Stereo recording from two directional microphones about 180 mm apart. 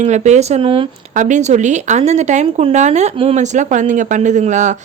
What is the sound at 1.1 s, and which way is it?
Speech, 45° right (ahead or behind).